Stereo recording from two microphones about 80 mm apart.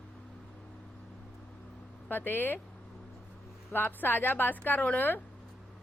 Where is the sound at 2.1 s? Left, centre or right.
Left.